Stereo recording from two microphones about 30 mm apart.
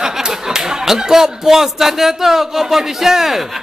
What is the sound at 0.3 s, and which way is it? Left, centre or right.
Speech, centre.